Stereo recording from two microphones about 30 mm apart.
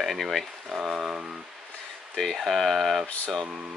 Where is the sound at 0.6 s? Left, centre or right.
Centre.